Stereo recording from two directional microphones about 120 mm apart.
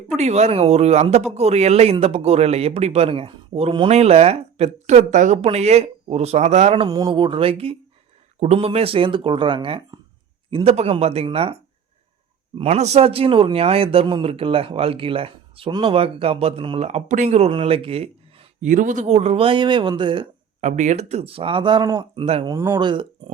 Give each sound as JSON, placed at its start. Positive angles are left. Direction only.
{"t": 0.2, "sound": "speech", "side_deg": -65}
{"t": 3.8, "sound": "speech", "side_deg": -60}
{"t": 6.8, "sound": "speech", "side_deg": -35}
{"t": 7.1, "sound": "speech", "side_deg": -45}
{"t": 12.6, "sound": "speech", "side_deg": -65}
{"t": 17.2, "sound": "speech", "side_deg": -60}
{"t": 20.6, "sound": "speech", "side_deg": -90}
{"t": 22.4, "sound": "speech", "side_deg": -20}
{"t": 22.8, "sound": "speech", "side_deg": -40}